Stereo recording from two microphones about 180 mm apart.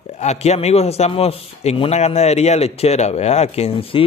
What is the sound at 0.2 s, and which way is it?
A man's voice, 35° left (ahead or behind).